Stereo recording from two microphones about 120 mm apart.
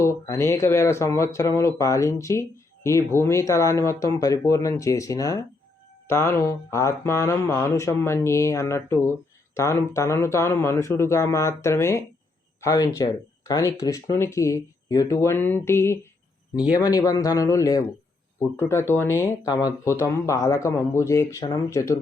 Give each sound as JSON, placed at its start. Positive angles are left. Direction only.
{"t": 0.0, "sound": "speech", "side_deg": 25}